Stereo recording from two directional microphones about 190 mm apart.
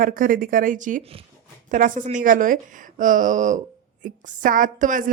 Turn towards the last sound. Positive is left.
turn(degrees=-45)  # may be behind; listen again after turning